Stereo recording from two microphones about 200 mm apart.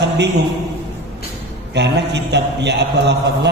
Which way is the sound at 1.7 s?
60° right (ahead or behind).